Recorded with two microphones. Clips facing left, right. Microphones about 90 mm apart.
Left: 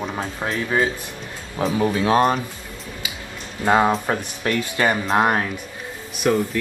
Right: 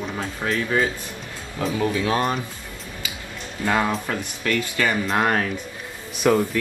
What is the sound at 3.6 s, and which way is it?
Speech, 30° left (ahead or behind).